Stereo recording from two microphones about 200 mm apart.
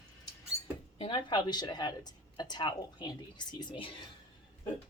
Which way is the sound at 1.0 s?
25° left (ahead or behind).